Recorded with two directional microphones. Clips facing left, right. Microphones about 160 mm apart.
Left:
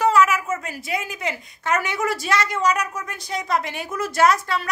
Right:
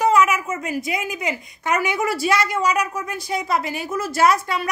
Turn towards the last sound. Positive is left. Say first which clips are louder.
# even
turn(degrees=-10)  # may be behind; listen again after turning